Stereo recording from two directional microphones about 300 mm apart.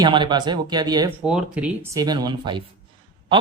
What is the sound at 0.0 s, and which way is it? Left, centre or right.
Speech, centre.